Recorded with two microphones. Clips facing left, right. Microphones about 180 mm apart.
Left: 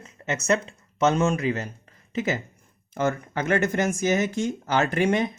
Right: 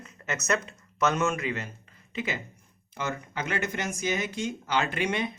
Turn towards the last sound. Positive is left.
turn(degrees=45)  # may be behind; listen again after turning